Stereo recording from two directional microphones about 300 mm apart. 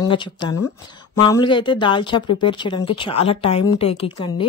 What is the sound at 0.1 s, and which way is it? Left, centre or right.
A woman's voice, centre.